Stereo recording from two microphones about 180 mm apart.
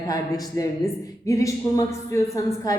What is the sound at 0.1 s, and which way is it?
A woman's voice, 20° left (ahead or behind).